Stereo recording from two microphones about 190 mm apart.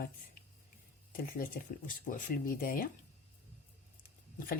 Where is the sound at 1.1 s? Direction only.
45° left (ahead or behind).